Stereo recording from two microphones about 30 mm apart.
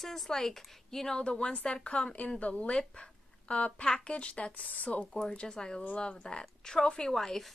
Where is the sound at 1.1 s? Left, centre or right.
Left.